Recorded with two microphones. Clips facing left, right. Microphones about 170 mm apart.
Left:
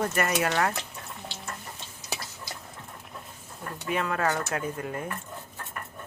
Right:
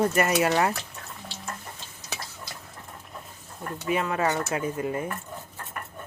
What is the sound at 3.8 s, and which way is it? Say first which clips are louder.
Speech: right 2 dB; 5° right (ahead or behind).